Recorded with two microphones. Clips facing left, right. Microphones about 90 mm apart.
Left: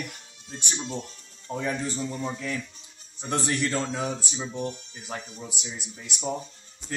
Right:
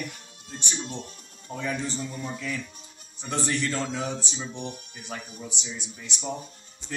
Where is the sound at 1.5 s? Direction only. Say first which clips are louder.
Left 1 dB; 15° left (ahead or behind).